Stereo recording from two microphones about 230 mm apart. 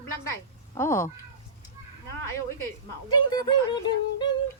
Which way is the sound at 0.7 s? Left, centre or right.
Centre.